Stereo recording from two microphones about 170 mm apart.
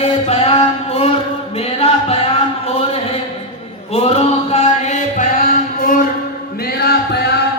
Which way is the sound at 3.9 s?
40° left (ahead or behind).